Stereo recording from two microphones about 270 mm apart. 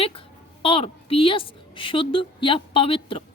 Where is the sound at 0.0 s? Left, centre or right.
Left.